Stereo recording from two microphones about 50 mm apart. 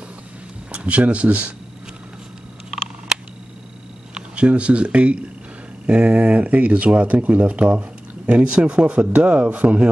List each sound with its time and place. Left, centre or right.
0.7 s speech: right
4.1 s speech: right